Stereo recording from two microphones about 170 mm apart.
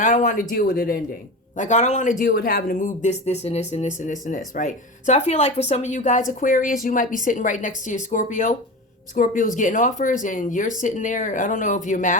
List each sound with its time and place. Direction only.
0.0 s speech: 50° left (ahead or behind)
1.5 s speech: 45° left (ahead or behind)